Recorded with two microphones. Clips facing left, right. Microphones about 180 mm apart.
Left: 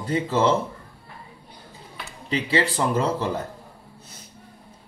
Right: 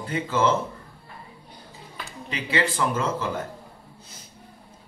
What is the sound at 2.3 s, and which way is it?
Speech, 35° left (ahead or behind).